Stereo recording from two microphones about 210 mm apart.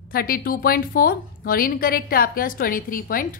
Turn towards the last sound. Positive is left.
turn(degrees=40)  # may be behind; listen again after turning